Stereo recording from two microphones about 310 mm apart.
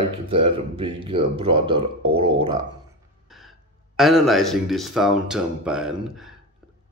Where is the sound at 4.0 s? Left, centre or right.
Centre.